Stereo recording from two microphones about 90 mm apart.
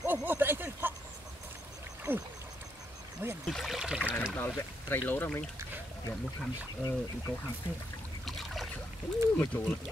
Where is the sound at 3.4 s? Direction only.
Centre (ahead or behind).